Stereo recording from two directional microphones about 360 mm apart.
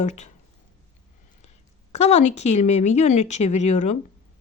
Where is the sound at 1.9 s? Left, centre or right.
Centre.